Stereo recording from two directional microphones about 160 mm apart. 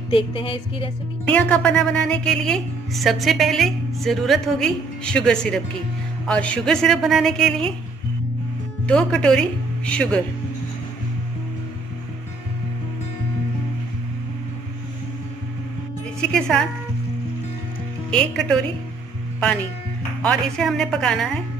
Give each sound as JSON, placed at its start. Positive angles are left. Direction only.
{"t": 0.1, "sound": "a woman's voice", "side_deg": 35}
{"t": 1.2, "sound": "speech", "side_deg": 10}
{"t": 8.8, "sound": "speech", "side_deg": 5}
{"t": 16.2, "sound": "speech", "side_deg": 5}
{"t": 18.1, "sound": "speech", "side_deg": 5}
{"t": 20.2, "sound": "speech", "side_deg": 5}